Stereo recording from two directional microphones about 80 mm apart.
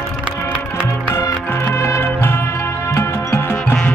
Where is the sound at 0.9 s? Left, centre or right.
Left.